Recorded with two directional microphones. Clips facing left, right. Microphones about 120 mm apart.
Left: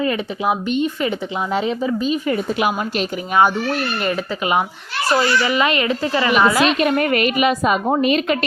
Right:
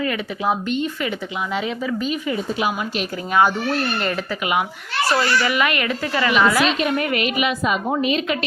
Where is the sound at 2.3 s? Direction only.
60° left (ahead or behind).